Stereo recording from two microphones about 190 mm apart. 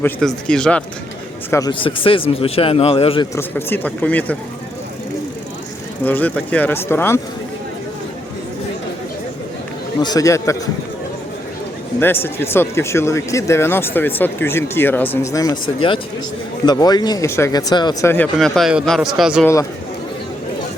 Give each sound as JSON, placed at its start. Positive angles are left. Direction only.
{"t": 0.0, "sound": "speech", "side_deg": 5}
{"t": 1.5, "sound": "speech", "side_deg": 15}
{"t": 1.8, "sound": "speech", "side_deg": 25}
{"t": 3.3, "sound": "speech", "side_deg": 10}
{"t": 6.1, "sound": "speech", "side_deg": 10}
{"t": 10.0, "sound": "speech", "side_deg": 20}
{"t": 11.9, "sound": "speech", "side_deg": 10}
{"t": 18.1, "sound": "speech", "side_deg": 5}